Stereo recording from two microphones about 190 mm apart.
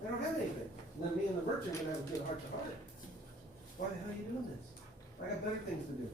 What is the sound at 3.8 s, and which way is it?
Speech, 45° left (ahead or behind).